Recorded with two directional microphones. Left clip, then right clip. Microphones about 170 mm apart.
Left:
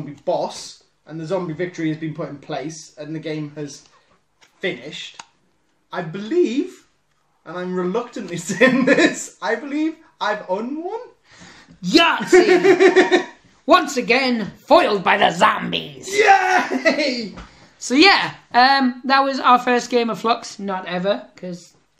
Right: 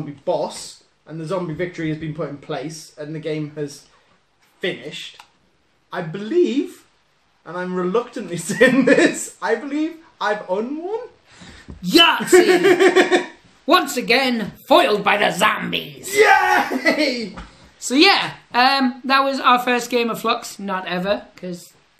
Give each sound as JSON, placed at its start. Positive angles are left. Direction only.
{"t": 1.0, "sound": "speech", "side_deg": -15}
{"t": 11.4, "sound": "speech", "side_deg": 30}
{"t": 12.3, "sound": "speech", "side_deg": -25}
{"t": 13.7, "sound": "speech", "side_deg": 30}
{"t": 16.2, "sound": "speech", "side_deg": -20}
{"t": 17.7, "sound": "a woman's voice", "side_deg": 45}
{"t": 18.5, "sound": "speech", "side_deg": 25}